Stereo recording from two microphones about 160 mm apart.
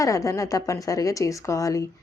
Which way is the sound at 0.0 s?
20° left (ahead or behind).